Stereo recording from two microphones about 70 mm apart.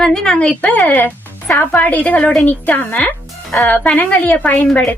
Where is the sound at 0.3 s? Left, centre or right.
Centre.